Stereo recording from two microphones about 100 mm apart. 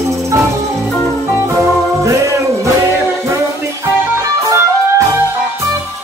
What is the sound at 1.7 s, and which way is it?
Music, 30° right (ahead or behind).